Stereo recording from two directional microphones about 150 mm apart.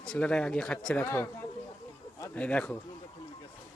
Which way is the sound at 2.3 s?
10° left (ahead or behind).